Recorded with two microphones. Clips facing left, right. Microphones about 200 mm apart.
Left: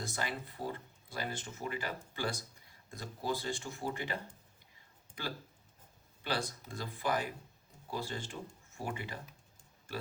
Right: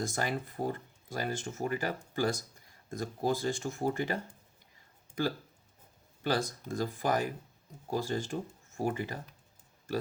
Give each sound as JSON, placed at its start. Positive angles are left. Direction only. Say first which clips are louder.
{"t": 0.0, "sound": "speech", "louder": "right 6 dB", "side_deg": -45}
{"t": 6.2, "sound": "speech", "louder": "right 6 dB", "side_deg": -45}